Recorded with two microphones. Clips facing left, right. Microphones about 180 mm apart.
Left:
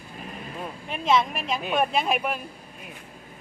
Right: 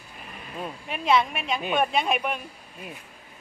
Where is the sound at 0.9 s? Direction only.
Centre (ahead or behind).